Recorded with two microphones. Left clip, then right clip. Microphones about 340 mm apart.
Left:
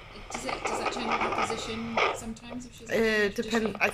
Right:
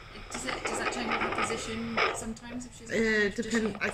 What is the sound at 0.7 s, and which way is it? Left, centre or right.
Speech, left.